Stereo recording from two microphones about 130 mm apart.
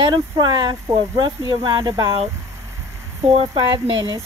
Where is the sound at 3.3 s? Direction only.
45° right (ahead or behind).